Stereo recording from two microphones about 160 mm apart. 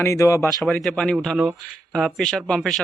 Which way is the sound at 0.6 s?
Centre (ahead or behind).